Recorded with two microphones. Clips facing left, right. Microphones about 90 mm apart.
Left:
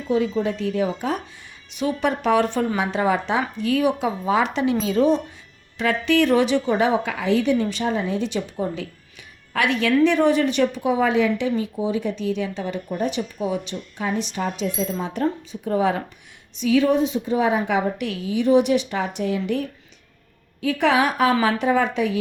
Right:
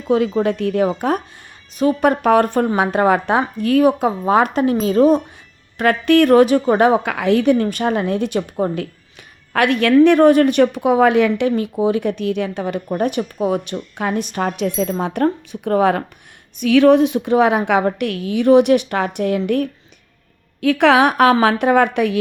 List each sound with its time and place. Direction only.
0.1 s speech: 65° right (ahead or behind); by 5.2 s 45° right (ahead or behind)
5.7 s a woman's voice: 55° right (ahead or behind)
16.6 s speech: 70° right (ahead or behind)
20.6 s a woman's voice: 70° right (ahead or behind)